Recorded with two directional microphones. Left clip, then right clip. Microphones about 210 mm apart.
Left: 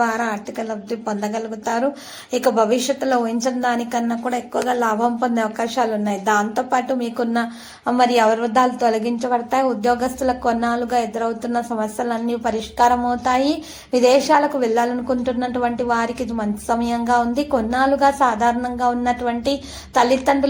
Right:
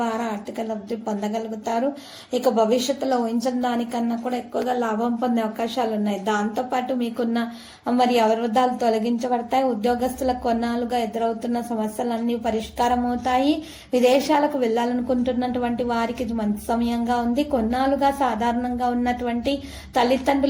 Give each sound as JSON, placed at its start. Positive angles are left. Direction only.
{"t": 0.0, "sound": "a woman's voice", "side_deg": 15}
{"t": 2.9, "sound": "a woman's voice", "side_deg": 15}
{"t": 5.2, "sound": "a woman's voice", "side_deg": 0}